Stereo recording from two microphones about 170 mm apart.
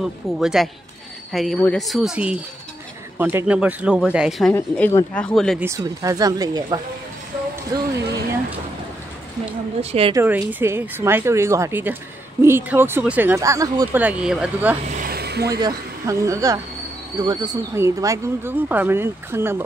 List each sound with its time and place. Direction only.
0.0 s speech: 5° right (ahead or behind)
4.6 s speech: 15° left (ahead or behind)
5.6 s speech: 20° right (ahead or behind)
9.8 s speech: 35° right (ahead or behind)
10.1 s speech: 15° right (ahead or behind)
14.0 s speech: 5° right (ahead or behind)
15.0 s a sound: 65° right (ahead or behind)
15.6 s speech: 20° right (ahead or behind)